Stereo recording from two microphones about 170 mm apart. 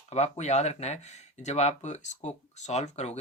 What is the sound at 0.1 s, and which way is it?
Speech, 40° left (ahead or behind).